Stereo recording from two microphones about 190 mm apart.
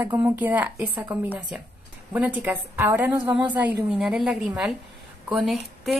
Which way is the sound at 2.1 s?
10° right (ahead or behind).